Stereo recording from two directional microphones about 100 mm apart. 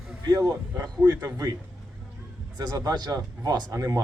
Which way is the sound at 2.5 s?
40° right (ahead or behind).